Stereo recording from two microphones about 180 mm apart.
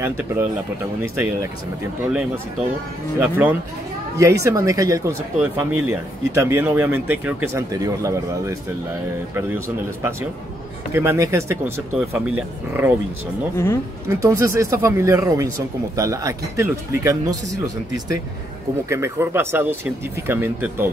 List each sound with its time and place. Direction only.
0.0 s speech: 10° right (ahead or behind)
3.2 s speech: 10° right (ahead or behind)
10.9 s speech: 15° right (ahead or behind)
14.0 s speech: 15° right (ahead or behind)